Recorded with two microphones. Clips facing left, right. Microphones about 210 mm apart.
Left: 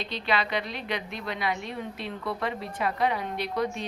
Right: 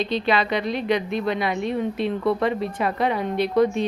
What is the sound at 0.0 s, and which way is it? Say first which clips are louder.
A woman's voice: right 7 dB; 20° right (ahead or behind).